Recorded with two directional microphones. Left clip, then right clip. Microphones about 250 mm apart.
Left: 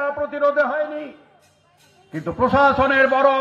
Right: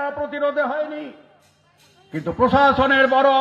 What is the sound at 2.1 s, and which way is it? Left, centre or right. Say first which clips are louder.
Speech: right 1 dB; right.